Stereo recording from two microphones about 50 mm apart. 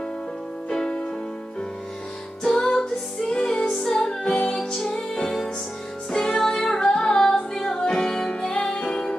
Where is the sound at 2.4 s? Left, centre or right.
Centre.